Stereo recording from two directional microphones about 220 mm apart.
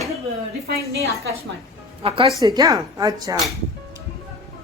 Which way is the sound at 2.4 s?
15° right (ahead or behind).